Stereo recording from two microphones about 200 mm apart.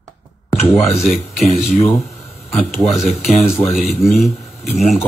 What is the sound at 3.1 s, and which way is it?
Speech, 30° left (ahead or behind).